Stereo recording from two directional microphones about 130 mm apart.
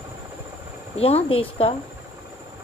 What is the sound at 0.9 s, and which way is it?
Speech, 50° left (ahead or behind).